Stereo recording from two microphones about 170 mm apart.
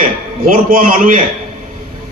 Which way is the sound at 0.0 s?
55° right (ahead or behind).